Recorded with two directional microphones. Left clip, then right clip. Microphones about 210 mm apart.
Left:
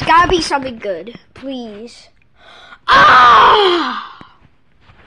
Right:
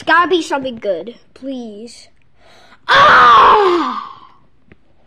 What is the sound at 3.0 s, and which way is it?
Groan, 5° left (ahead or behind).